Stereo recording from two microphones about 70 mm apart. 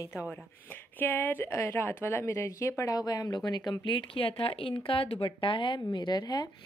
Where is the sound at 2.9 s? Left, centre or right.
Left.